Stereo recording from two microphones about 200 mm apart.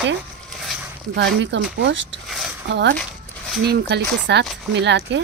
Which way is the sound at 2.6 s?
60° right (ahead or behind).